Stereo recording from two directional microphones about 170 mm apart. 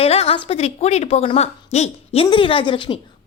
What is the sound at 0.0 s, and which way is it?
Speech, 35° left (ahead or behind).